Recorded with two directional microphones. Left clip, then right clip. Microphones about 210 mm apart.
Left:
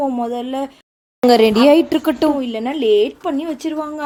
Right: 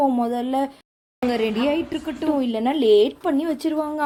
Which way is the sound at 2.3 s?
5° right (ahead or behind).